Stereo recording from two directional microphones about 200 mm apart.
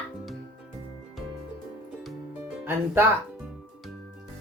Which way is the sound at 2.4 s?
10° right (ahead or behind).